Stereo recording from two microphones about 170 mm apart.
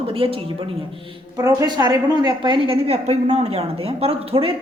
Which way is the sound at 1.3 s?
25° right (ahead or behind).